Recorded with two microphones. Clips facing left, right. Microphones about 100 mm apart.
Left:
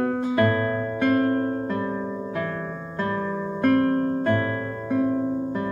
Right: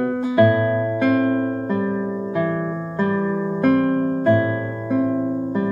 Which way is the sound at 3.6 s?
15° right (ahead or behind).